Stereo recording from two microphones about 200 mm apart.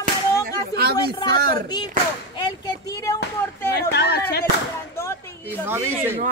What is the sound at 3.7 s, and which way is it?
Speech, 55° left (ahead or behind).